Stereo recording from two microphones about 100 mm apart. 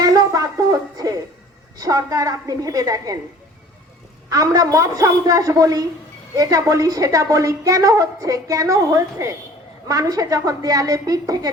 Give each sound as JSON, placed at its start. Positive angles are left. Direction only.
{"t": 0.0, "sound": "a sound", "side_deg": -35}
{"t": 1.8, "sound": "a woman's voice", "side_deg": -35}
{"t": 4.3, "sound": "a woman's voice", "side_deg": -35}